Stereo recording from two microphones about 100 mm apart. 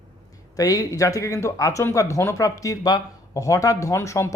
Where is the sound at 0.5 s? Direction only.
35° left (ahead or behind).